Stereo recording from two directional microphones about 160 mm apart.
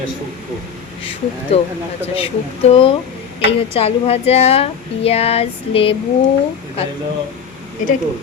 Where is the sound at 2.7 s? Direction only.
35° left (ahead or behind).